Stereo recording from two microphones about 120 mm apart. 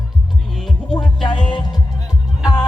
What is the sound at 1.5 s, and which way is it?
Music, 40° left (ahead or behind).